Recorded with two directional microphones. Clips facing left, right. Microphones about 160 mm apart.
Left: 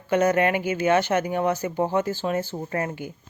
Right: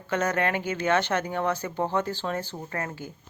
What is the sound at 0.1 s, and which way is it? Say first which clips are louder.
Speech: left 6 dB; 10° left (ahead or behind).